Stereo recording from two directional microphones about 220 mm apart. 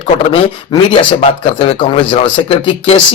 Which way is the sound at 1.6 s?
25° left (ahead or behind).